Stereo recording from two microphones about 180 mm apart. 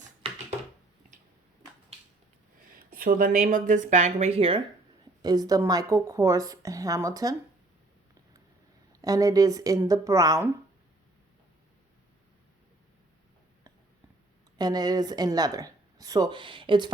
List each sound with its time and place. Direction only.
0.2 s a sound: 30° right (ahead or behind)
3.0 s speech: 50° right (ahead or behind); by 7.3 s 20° right (ahead or behind)
8.9 s speech: 20° right (ahead or behind)
14.6 s speech: 20° right (ahead or behind)